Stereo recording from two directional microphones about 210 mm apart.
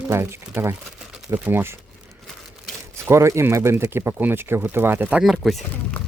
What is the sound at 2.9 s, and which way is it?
Speech, 15° right (ahead or behind).